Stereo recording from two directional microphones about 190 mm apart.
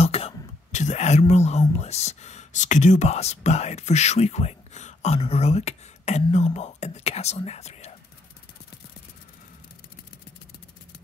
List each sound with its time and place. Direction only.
0.0 s whispering: 30° left (ahead or behind)
1.8 s speech: 35° left (ahead or behind)